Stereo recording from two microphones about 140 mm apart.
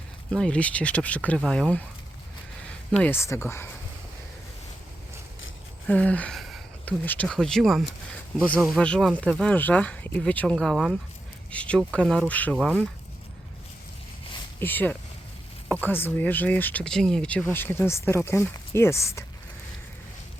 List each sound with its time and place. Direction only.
0.3 s speech: 5° left (ahead or behind)
3.0 s speech: 15° left (ahead or behind)
5.9 s a sound: 10° left (ahead or behind)
6.8 s speech: 10° left (ahead or behind)
12.5 s speech: 10° right (ahead or behind)
14.6 s speech: 15° left (ahead or behind)